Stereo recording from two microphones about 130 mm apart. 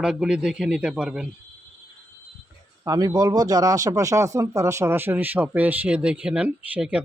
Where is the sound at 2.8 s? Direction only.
30° right (ahead or behind).